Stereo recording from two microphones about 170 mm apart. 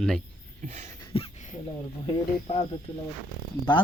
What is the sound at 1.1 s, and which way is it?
Speech, 40° left (ahead or behind).